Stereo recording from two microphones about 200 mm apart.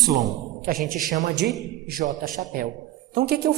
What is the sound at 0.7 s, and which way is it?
A man's voice, 45° right (ahead or behind).